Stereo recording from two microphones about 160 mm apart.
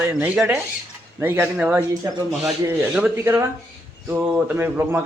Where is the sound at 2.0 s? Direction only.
20° right (ahead or behind).